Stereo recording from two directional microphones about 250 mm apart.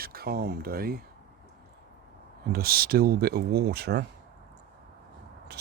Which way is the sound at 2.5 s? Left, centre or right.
Right.